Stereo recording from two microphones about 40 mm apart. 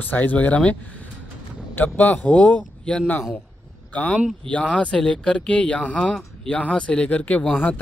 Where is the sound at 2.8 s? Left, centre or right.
Left.